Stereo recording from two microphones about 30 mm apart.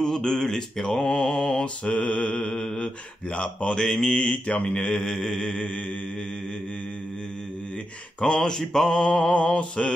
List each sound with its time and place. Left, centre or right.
0.0 s mantra: centre
1.9 s mantra: left
2.3 s mantra: left
3.3 s mantra: left
3.8 s mantra: left
4.2 s mantra: left
5.1 s mantra: centre
5.5 s mantra: left
8.2 s mantra: left
9.3 s mantra: left